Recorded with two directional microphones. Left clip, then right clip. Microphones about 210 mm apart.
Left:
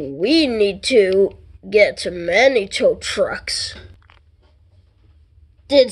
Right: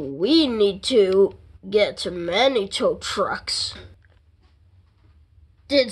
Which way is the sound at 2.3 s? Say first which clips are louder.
Left 6 dB; 60° right (ahead or behind).